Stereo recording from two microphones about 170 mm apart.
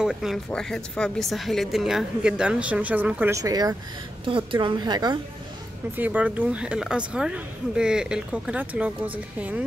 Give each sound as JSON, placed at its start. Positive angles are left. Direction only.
{"t": 0.0, "sound": "a woman's voice", "side_deg": -5}
{"t": 4.3, "sound": "a woman's voice", "side_deg": -30}
{"t": 5.9, "sound": "speech", "side_deg": -10}